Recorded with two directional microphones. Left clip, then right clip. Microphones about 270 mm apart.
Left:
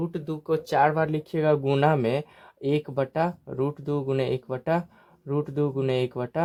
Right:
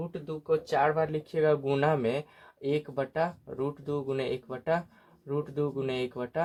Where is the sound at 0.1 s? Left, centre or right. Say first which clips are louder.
Left 2 dB; left.